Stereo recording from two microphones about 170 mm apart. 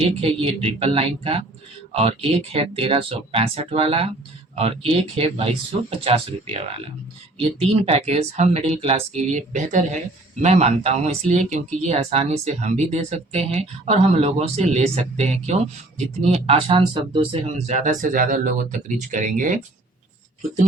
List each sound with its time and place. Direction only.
0.2 s speech: 35° right (ahead or behind)
17.7 s speech: 45° right (ahead or behind)